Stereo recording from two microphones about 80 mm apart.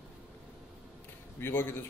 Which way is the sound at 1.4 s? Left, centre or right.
Left.